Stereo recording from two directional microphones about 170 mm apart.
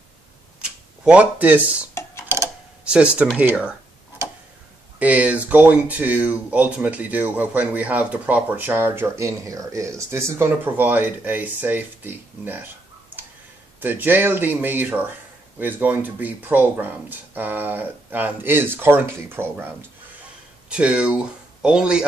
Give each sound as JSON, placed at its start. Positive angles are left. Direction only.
{"t": 0.6, "sound": "speech", "side_deg": -5}
{"t": 2.2, "sound": "tick-tock", "side_deg": -15}
{"t": 2.8, "sound": "speech", "side_deg": -5}
{"t": 4.2, "sound": "tick-tock", "side_deg": -15}
{"t": 4.9, "sound": "speech", "side_deg": -10}
{"t": 13.7, "sound": "speech", "side_deg": -10}
{"t": 20.7, "sound": "speech", "side_deg": -5}